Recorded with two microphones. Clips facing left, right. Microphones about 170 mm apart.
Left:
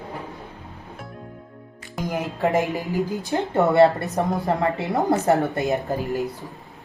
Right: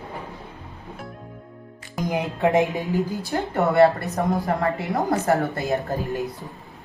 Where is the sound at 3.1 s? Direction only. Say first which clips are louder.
Left 2 dB; 20° left (ahead or behind).